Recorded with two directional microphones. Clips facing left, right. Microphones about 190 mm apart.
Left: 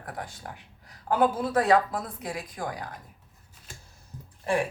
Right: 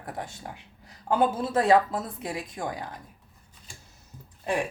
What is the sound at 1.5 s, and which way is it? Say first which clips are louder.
A woman's voice: right 1 dB; 25° right (ahead or behind).